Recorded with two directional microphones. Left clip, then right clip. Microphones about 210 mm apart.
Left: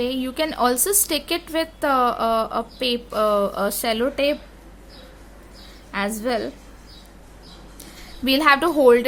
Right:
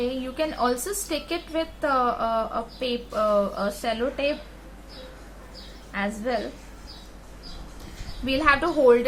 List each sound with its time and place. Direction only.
0.0 s a woman's voice: 45° left (ahead or behind)
5.9 s a woman's voice: 50° left (ahead or behind)
8.2 s a woman's voice: 50° left (ahead or behind)